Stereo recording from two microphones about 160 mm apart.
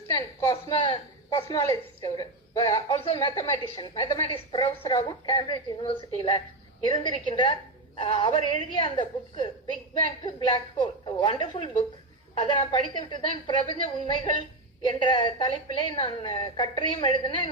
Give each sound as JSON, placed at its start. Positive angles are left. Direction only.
{"t": 0.1, "sound": "a woman's voice", "side_deg": 20}